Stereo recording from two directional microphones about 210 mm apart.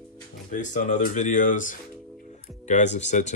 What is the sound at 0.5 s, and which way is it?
Speech, 35° left (ahead or behind).